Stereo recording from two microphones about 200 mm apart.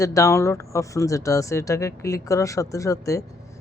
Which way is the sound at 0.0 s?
15° left (ahead or behind).